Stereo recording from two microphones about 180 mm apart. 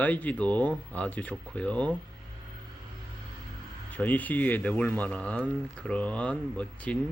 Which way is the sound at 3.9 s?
10° left (ahead or behind).